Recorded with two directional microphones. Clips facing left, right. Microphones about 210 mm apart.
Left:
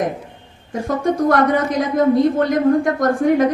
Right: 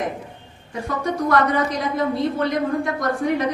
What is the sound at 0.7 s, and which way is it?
A woman's voice, 45° left (ahead or behind).